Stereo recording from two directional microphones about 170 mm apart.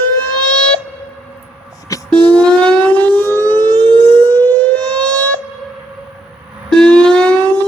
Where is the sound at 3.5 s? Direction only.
25° right (ahead or behind).